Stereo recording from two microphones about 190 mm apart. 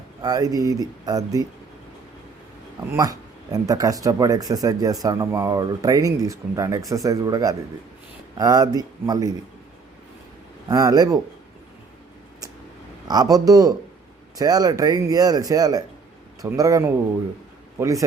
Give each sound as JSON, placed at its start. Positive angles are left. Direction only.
{"t": 0.2, "sound": "speech", "side_deg": -20}
{"t": 2.9, "sound": "speech", "side_deg": -20}
{"t": 10.7, "sound": "speech", "side_deg": -20}
{"t": 13.1, "sound": "a man's voice", "side_deg": -20}